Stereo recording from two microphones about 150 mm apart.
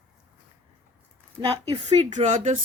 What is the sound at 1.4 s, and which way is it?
Speech, 40° right (ahead or behind).